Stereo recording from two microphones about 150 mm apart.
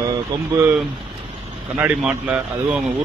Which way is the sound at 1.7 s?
10° right (ahead or behind).